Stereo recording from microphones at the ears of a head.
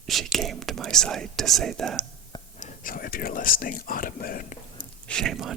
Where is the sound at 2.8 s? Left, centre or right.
Left.